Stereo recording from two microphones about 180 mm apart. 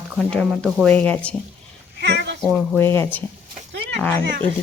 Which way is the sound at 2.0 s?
70° right (ahead or behind).